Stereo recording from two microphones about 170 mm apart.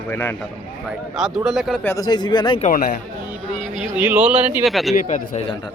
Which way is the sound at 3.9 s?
10° right (ahead or behind).